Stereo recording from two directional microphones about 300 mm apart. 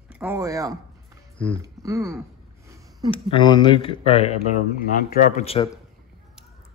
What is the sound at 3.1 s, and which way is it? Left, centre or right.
Speech, centre.